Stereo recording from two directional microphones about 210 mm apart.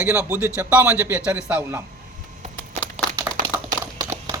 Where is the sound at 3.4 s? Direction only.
40° right (ahead or behind).